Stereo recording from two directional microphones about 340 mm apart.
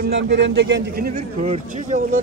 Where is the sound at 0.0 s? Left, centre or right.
Right.